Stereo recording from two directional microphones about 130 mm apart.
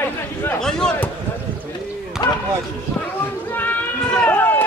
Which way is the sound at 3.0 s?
15° left (ahead or behind).